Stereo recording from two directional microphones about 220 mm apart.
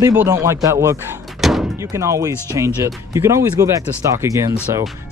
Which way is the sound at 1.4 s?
Centre (ahead or behind).